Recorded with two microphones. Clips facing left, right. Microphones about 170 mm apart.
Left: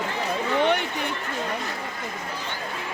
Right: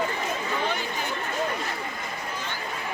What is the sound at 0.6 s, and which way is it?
Chatter, 70° left (ahead or behind).